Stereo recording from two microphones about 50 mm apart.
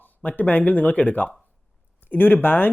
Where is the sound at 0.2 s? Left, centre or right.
Left.